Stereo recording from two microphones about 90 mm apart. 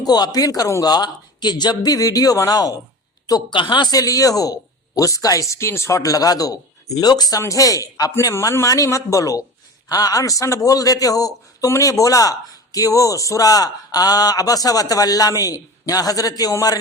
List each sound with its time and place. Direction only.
0.0 s a man's voice: 45° left (ahead or behind)
3.5 s speech: 65° left (ahead or behind)
3.9 s a man's voice: 40° left (ahead or behind)
8.1 s a man's voice: 30° left (ahead or behind)